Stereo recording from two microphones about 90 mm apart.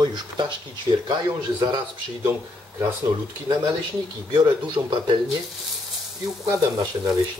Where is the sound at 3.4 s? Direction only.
55° right (ahead or behind).